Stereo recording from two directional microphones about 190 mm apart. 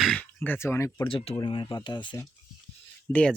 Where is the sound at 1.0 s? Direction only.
30° left (ahead or behind).